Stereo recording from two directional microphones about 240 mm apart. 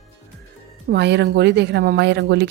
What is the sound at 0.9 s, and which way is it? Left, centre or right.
Speech, right.